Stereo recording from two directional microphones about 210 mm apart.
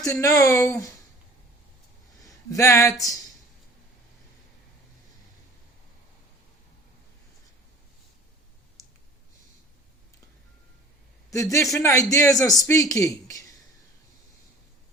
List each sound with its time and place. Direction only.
0.0 s speech: 15° left (ahead or behind)
2.2 s speech: 15° left (ahead or behind)
11.3 s speech: 15° left (ahead or behind)